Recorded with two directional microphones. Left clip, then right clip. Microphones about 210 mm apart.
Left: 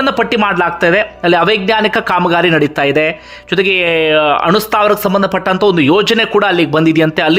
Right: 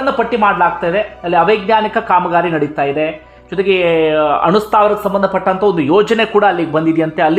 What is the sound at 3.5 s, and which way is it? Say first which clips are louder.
Speech: left 1 dB; 15° left (ahead or behind).